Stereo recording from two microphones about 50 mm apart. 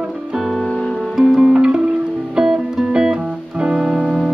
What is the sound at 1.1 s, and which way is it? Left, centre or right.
Music, centre.